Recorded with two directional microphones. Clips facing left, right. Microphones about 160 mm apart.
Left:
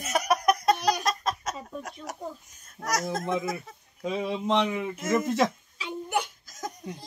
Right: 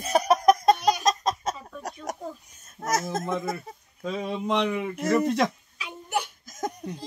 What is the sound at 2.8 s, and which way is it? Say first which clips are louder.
Speech: right 2 dB; 25° right (ahead or behind).